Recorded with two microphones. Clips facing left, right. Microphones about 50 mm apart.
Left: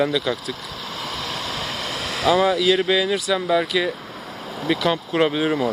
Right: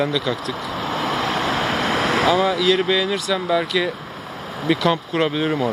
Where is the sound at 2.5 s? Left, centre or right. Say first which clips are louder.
Even; centre.